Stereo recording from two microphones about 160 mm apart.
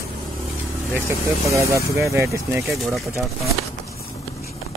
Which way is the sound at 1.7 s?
20° right (ahead or behind).